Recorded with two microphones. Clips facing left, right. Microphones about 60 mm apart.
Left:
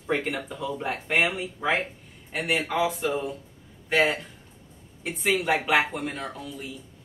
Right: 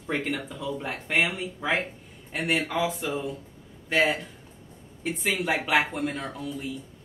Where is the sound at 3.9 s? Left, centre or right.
Centre.